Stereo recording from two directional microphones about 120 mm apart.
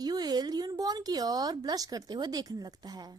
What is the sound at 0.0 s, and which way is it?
A woman's voice, 35° right (ahead or behind).